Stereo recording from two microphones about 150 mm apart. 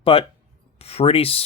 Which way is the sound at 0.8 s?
45° left (ahead or behind).